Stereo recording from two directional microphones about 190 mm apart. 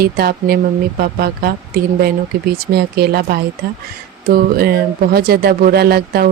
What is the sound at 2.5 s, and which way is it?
Speech, 55° right (ahead or behind).